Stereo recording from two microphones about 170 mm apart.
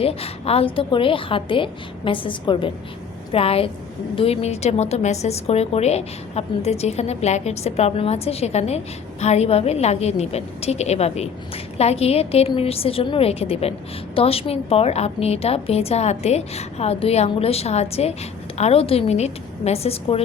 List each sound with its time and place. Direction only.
0.0 s a woman's voice: 35° left (ahead or behind)